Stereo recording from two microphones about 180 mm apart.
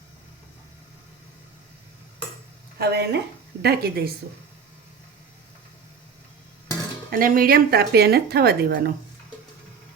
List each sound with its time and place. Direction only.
2.7 s a woman's voice: 60° right (ahead or behind)
7.1 s a woman's voice: 50° right (ahead or behind)